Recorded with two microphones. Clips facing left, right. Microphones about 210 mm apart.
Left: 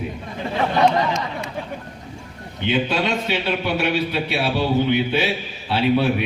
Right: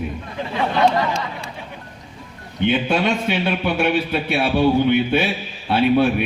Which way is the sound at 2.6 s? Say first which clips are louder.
Right 3 dB; 50° right (ahead or behind).